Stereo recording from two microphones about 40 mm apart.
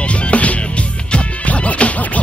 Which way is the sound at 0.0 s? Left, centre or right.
Left.